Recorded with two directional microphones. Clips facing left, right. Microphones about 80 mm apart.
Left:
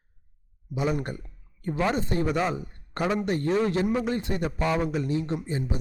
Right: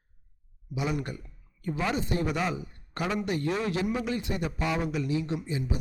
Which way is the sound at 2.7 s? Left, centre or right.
Left.